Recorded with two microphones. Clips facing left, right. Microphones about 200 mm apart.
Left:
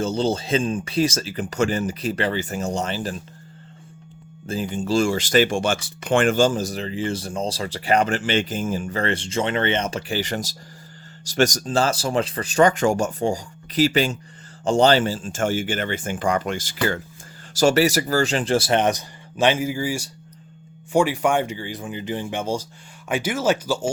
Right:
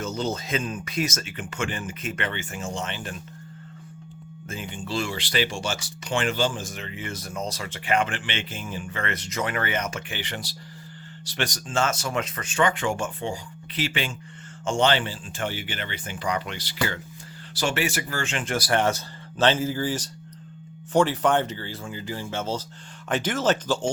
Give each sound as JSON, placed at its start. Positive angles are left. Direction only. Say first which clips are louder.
{"t": 0.0, "sound": "speech", "louder": "left 6 dB", "side_deg": 30}
{"t": 4.4, "sound": "speech", "louder": "left 9 dB", "side_deg": 35}